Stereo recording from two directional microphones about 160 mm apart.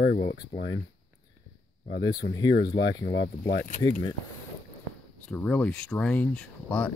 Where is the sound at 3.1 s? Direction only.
90° left.